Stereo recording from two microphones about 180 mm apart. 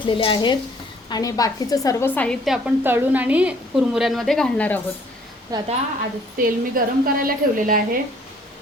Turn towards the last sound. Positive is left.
turn(degrees=-50)  # may be behind; listen again after turning